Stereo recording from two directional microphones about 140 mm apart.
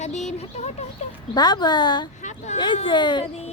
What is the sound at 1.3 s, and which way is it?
A woman's voice, 30° left (ahead or behind).